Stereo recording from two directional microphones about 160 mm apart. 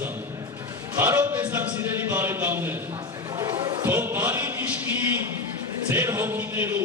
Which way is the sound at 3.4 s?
25° right (ahead or behind).